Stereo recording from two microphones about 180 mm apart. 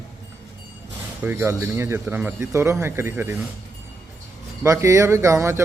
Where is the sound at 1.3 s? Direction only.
10° right (ahead or behind).